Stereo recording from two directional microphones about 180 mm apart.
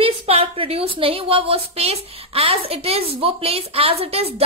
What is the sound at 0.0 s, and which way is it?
A woman's voice, 30° right (ahead or behind).